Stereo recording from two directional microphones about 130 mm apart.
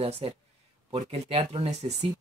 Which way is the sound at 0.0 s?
50° right (ahead or behind).